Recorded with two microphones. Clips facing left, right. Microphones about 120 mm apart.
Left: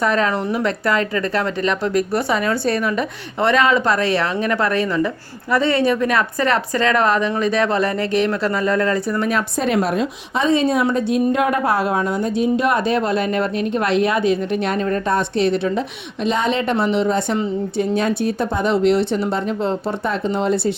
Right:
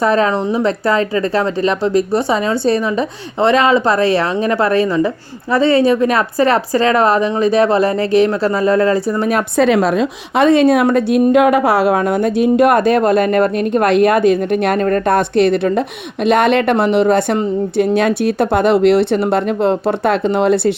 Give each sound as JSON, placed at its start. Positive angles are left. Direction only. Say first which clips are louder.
{"t": 0.0, "sound": "speech", "louder": "right 5 dB", "side_deg": -30}
{"t": 9.6, "sound": "a woman's voice", "louder": "right 7 dB", "side_deg": -90}